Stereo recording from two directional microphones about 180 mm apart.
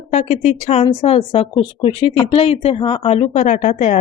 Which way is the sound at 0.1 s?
35° left (ahead or behind).